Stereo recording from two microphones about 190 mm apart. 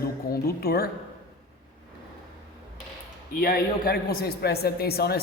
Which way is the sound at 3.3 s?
50° left (ahead or behind).